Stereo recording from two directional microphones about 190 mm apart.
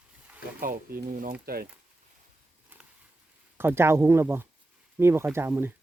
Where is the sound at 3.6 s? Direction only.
10° right (ahead or behind).